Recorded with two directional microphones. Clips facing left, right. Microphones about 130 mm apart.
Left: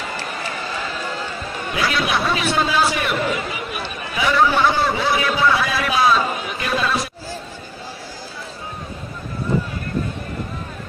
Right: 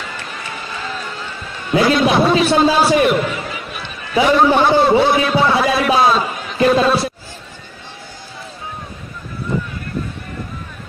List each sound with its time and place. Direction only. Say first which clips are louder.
1.8 s a man's voice: right 8 dB; 30° right (ahead or behind)